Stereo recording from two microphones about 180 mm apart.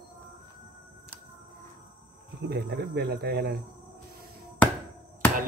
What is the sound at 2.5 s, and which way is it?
Speech, 65° right (ahead or behind).